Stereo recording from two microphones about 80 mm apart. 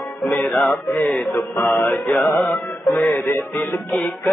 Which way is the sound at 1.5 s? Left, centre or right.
Left.